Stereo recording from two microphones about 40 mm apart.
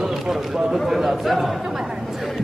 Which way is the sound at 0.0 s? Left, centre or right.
Centre.